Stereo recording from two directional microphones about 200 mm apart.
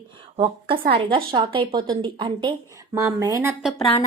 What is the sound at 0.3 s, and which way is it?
A woman's voice, 25° right (ahead or behind).